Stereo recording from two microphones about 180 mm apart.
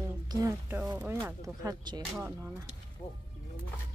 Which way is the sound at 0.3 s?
15° right (ahead or behind).